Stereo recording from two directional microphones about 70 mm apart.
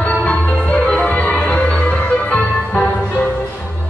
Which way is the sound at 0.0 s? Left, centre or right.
Left.